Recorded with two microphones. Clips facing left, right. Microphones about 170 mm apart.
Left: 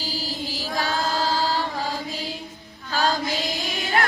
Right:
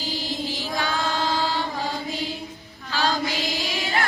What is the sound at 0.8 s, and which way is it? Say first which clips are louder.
Mantra: left 2 dB; 40° left (ahead or behind).